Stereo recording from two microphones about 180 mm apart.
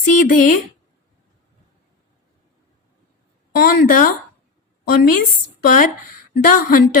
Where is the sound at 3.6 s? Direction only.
55° left (ahead or behind).